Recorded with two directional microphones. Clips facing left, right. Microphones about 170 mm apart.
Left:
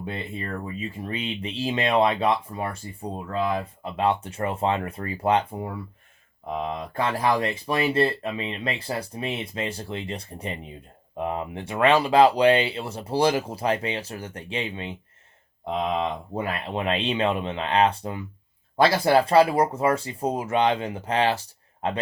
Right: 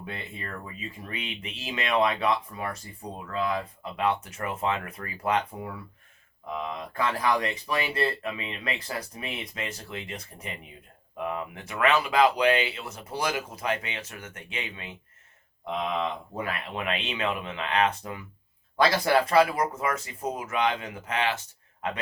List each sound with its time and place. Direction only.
0.0 s speech: 30° left (ahead or behind)